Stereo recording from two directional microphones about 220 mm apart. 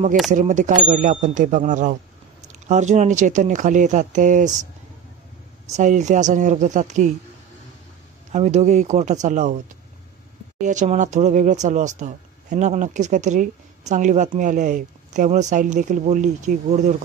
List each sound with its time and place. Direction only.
0.3 s speech: 35° right (ahead or behind)
5.7 s speech: 35° right (ahead or behind)
8.3 s speech: 30° right (ahead or behind)
10.6 s speech: 35° right (ahead or behind)